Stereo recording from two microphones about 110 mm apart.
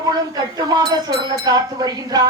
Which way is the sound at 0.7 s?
40° right (ahead or behind).